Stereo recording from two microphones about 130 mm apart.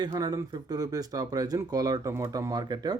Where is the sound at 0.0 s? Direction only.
30° right (ahead or behind).